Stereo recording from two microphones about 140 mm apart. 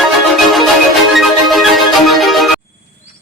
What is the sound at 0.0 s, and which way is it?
Marimba, centre (ahead or behind).